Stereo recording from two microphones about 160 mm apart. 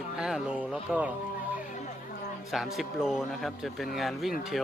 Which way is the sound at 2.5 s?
Centre (ahead or behind).